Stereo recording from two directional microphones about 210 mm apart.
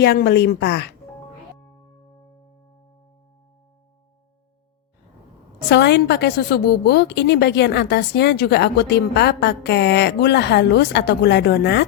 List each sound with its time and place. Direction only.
0.0 s a woman's voice: 50° left (ahead or behind)
5.6 s a woman's voice: 55° left (ahead or behind)